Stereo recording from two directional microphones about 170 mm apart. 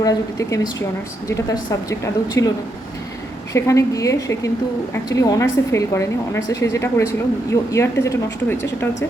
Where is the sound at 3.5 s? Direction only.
20° left (ahead or behind).